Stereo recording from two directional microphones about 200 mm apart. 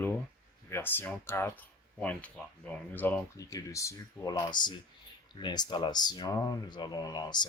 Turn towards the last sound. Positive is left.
turn(degrees=20)  # may be behind; listen again after turning